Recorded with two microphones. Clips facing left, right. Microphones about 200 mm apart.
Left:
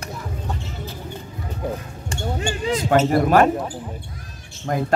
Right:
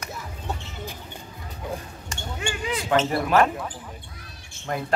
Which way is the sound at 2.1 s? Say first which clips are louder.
Left 6 dB; 35° left (ahead or behind).